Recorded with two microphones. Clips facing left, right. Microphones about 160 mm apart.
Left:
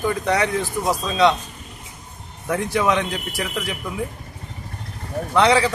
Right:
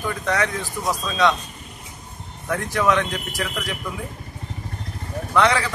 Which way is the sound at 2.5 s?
25° left (ahead or behind).